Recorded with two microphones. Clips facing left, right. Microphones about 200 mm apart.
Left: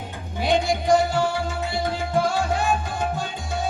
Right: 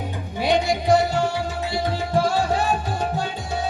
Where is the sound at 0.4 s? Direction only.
50° left (ahead or behind).